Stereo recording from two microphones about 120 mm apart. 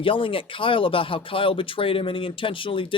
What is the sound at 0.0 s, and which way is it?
Speech, 45° left (ahead or behind).